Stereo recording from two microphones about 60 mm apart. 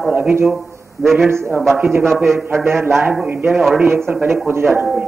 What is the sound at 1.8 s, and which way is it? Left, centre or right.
Speech, right.